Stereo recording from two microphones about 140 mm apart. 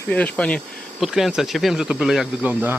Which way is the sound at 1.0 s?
5° right (ahead or behind).